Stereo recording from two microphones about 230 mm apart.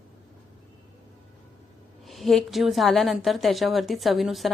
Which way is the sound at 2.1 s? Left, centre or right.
Centre.